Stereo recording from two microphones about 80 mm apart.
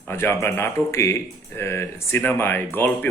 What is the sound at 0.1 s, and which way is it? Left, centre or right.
A man's voice, left.